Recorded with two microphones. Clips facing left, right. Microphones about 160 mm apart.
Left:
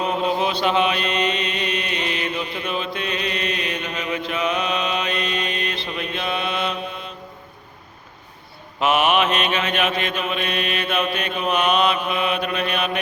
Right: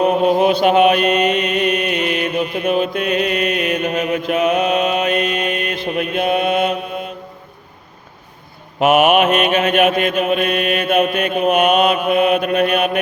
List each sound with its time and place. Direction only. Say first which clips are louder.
0.0 s mantra: right 8 dB; 50° right (ahead or behind)
8.8 s mantra: right 6 dB; 50° right (ahead or behind)